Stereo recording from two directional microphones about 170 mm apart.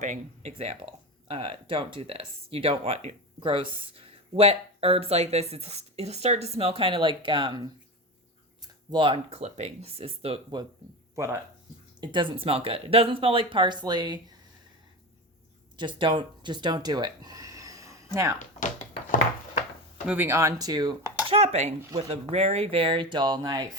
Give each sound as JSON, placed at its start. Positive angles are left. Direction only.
{"t": 0.0, "sound": "speech", "side_deg": -40}
{"t": 8.6, "sound": "speech", "side_deg": -25}
{"t": 11.1, "sound": "speech", "side_deg": -20}
{"t": 11.9, "sound": "speech", "side_deg": -30}
{"t": 15.8, "sound": "speech", "side_deg": -30}
{"t": 20.1, "sound": "speech", "side_deg": -15}
{"t": 21.2, "sound": "speech", "side_deg": -35}